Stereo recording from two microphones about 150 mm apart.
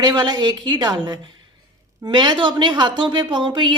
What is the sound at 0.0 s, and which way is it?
A woman's voice, 30° right (ahead or behind).